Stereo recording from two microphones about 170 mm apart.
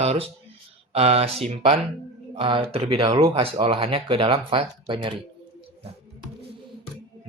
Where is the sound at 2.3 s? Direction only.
30° right (ahead or behind).